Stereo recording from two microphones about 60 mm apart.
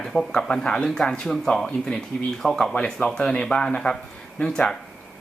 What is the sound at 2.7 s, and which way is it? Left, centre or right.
Speech, centre.